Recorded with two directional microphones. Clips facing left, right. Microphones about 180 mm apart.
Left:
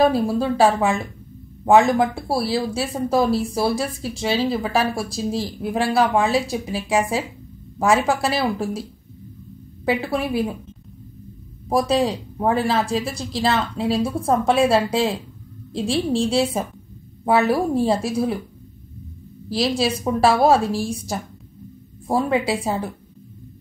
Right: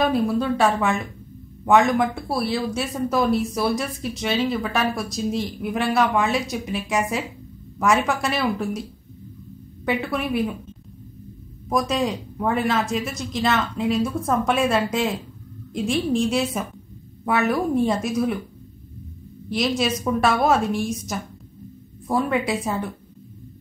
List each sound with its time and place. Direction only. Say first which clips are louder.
0.0 s speech: left 3 dB; 30° left (ahead or behind)
9.8 s speech: left 2 dB; 30° left (ahead or behind)
11.7 s speech: left 3 dB; 35° left (ahead or behind)
19.8 s speech: left 4 dB; 30° left (ahead or behind)